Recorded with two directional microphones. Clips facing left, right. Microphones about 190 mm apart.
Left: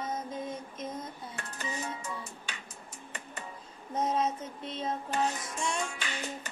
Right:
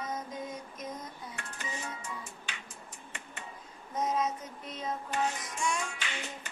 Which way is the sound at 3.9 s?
30° left (ahead or behind).